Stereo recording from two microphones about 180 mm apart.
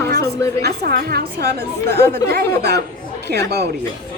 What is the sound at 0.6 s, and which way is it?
A woman's voice, 60° right (ahead or behind).